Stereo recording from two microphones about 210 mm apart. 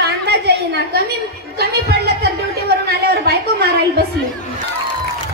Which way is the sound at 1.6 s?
50° right (ahead or behind).